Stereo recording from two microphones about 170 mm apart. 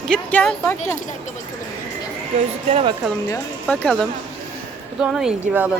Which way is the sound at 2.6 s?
35° right (ahead or behind).